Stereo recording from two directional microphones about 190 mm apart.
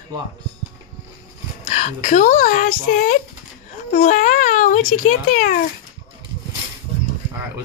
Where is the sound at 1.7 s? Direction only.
35° left (ahead or behind).